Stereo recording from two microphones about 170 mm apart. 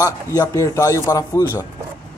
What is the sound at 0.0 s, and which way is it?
Speech, 20° left (ahead or behind).